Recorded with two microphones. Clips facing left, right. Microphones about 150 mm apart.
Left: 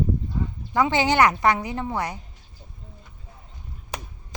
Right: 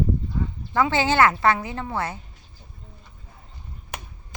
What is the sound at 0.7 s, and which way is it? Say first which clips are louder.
A woman's voice: even; 20° left (ahead or behind).